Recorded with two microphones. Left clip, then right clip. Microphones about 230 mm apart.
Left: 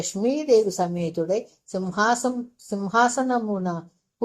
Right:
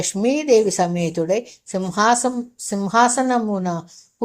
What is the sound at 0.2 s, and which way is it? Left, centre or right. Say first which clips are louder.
Speech: right 3 dB; right.